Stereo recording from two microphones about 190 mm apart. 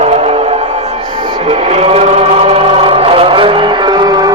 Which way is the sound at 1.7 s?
35° right (ahead or behind).